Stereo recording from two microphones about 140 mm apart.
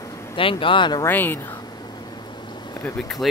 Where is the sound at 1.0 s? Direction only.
15° left (ahead or behind).